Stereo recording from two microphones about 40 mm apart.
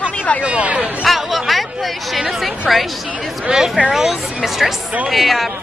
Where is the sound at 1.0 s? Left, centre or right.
Centre.